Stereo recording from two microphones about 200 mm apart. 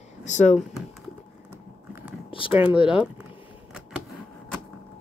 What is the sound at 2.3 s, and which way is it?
Speech, 25° left (ahead or behind).